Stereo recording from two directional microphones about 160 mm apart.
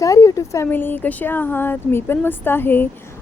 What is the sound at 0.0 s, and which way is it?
Speech, 20° left (ahead or behind).